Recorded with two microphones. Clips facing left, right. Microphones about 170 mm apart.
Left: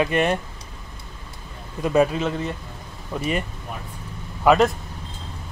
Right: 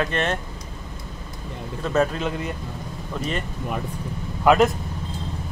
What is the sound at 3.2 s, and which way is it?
Speech, 10° left (ahead or behind).